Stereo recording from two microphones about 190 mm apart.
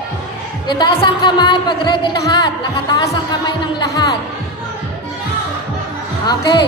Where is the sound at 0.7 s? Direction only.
25° left (ahead or behind).